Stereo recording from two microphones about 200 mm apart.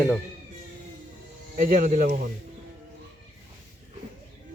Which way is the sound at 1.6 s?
45° right (ahead or behind).